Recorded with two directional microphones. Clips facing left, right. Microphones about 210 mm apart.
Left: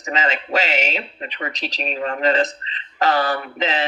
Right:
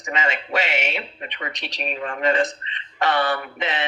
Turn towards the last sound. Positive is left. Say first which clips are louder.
# left 4 dB
turn(degrees=40)  # may be behind; listen again after turning